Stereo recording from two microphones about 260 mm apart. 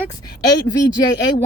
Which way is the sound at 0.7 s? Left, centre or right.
Centre.